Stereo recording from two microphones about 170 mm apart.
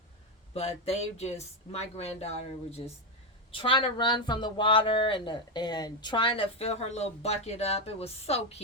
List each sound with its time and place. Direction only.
0.5 s speech: 35° left (ahead or behind)